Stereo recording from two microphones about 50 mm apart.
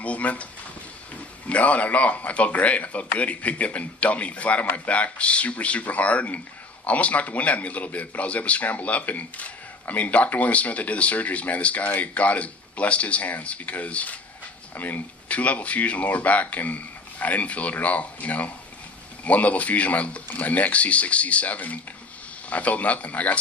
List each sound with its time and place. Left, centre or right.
0.0 s speech: left